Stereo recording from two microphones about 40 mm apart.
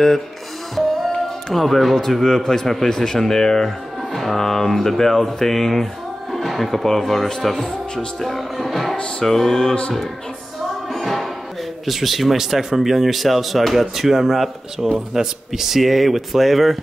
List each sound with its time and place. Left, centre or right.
0.7 s music: centre
2.0 s speech: centre
4.1 s speech: centre
7.5 s speech: centre
8.2 s speech: centre
10.9 s music: centre
11.8 s speech: centre